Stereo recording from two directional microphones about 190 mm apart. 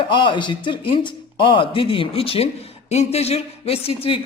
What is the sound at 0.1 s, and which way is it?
Speech, 25° left (ahead or behind).